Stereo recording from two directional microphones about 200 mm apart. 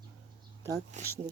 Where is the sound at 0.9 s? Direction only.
40° right (ahead or behind).